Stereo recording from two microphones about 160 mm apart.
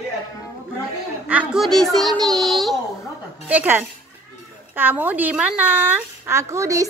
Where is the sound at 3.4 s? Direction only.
10° right (ahead or behind).